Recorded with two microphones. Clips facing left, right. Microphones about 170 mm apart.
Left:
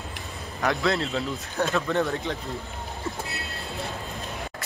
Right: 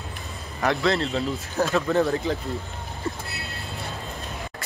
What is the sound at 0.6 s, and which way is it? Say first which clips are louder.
Speech: right 2 dB; centre (ahead or behind).